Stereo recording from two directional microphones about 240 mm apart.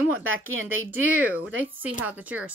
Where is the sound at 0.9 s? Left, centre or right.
Centre.